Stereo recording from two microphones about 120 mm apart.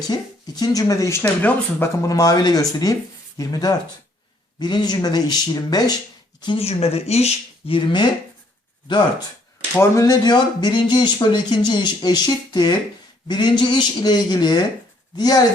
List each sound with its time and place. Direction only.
0.1 s speech: 35° left (ahead or behind)
1.2 s speech: 15° left (ahead or behind)
2.0 s speech: 30° left (ahead or behind)
6.6 s speech: 60° left (ahead or behind)
7.8 s speech: 40° left (ahead or behind)
9.9 s speech: 30° left (ahead or behind)